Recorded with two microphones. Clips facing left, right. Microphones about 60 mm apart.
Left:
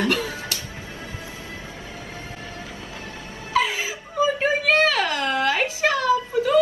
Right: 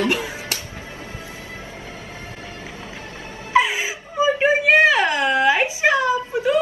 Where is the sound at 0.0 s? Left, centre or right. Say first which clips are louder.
Right 1 dB; right.